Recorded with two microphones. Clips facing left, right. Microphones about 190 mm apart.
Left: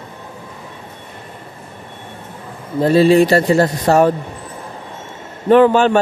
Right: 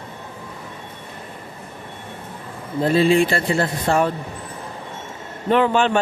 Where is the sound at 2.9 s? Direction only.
40° left (ahead or behind).